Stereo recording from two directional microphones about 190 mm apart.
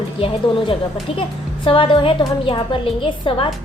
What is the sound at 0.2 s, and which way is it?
A woman's voice, 30° left (ahead or behind).